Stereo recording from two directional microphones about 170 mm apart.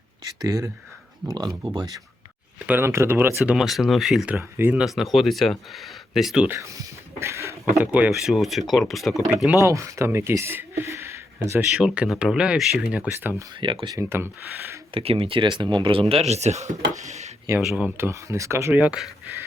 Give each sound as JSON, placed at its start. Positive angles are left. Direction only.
{"t": 0.4, "sound": "speech", "side_deg": -20}
{"t": 2.6, "sound": "speech", "side_deg": -15}
{"t": 6.6, "sound": "a sound", "side_deg": -15}
{"t": 7.8, "sound": "speech", "side_deg": -10}
{"t": 9.3, "sound": "speech", "side_deg": -10}
{"t": 11.8, "sound": "speech", "side_deg": -5}
{"t": 13.6, "sound": "speech", "side_deg": -30}
{"t": 14.9, "sound": "speech", "side_deg": -35}
{"t": 17.6, "sound": "speech", "side_deg": -10}